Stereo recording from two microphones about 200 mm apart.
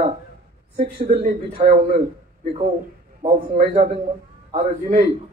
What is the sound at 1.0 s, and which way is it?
Speech, 35° right (ahead or behind).